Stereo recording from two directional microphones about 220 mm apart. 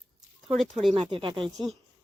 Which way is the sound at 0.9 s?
25° right (ahead or behind).